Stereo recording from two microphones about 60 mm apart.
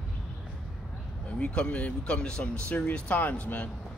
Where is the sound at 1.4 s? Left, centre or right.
Centre.